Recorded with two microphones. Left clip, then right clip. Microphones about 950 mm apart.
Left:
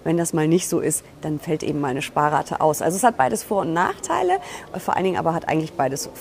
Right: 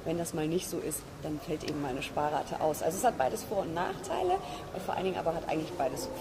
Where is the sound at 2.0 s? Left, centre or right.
Left.